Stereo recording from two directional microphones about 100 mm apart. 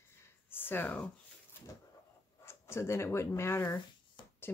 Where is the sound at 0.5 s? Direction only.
20° left (ahead or behind).